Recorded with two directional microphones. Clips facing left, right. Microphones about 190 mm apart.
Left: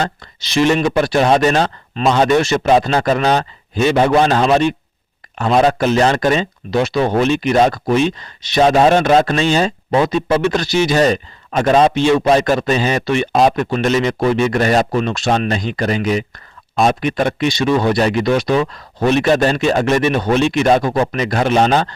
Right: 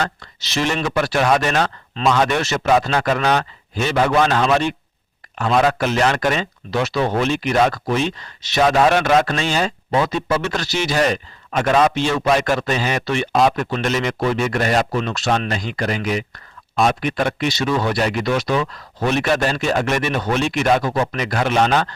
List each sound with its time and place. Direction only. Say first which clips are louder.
0.4 s speech: left 7 dB; 15° left (ahead or behind); by 5.7 s 30° left (ahead or behind)
5.8 s speech: left 4 dB; 20° left (ahead or behind)
11.5 s speech: left 4 dB; 30° left (ahead or behind)
11.9 s speech: left 5 dB; 20° left (ahead or behind)